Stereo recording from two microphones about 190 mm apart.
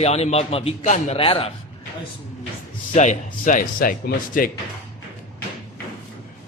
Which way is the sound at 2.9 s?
40° left (ahead or behind).